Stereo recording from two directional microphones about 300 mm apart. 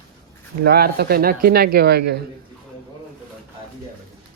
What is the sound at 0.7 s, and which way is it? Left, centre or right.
Speech, right.